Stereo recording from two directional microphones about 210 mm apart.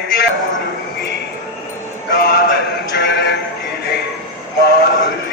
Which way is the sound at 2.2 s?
50° left (ahead or behind).